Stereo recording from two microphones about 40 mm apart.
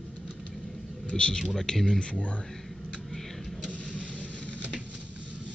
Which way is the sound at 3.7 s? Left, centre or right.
Left.